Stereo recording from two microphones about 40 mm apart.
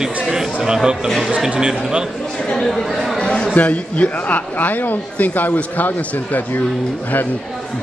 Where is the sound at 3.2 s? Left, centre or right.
Left.